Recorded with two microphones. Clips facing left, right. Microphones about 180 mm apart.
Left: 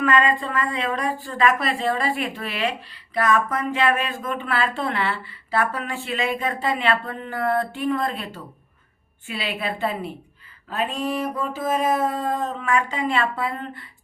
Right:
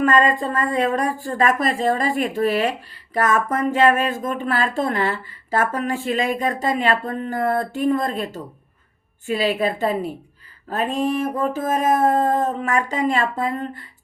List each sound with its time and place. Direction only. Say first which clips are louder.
0.0 s a woman's voice: right 3 dB; 45° right (ahead or behind)